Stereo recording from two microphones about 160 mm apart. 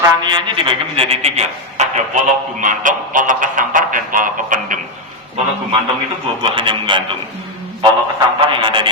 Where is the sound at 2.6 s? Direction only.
55° right (ahead or behind).